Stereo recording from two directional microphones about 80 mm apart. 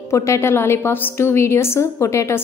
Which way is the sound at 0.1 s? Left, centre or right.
Left.